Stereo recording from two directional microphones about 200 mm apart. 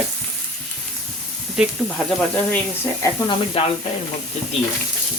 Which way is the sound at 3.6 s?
30° left (ahead or behind).